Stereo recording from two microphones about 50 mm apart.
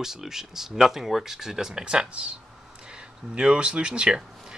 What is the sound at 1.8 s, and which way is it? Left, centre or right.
Speech, centre.